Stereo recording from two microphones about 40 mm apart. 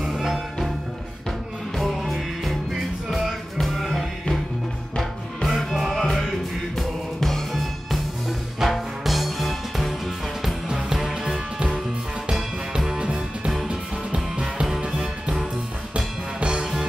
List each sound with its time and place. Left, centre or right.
0.0 s music: centre
1.8 s music: centre
7.2 s music: centre
8.5 s music: centre
10.4 s music: centre
12.7 s music: centre
16.3 s music: right